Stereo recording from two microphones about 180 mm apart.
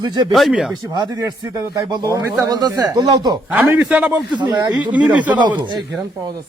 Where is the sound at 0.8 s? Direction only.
25° right (ahead or behind).